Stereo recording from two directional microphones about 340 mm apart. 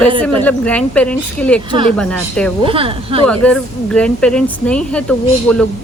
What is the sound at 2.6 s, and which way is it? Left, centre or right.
Speech, centre.